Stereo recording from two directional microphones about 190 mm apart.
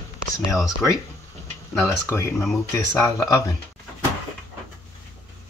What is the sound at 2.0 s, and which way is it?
Speech, 10° left (ahead or behind).